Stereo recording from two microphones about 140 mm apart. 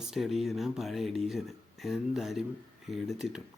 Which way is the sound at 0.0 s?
Centre (ahead or behind).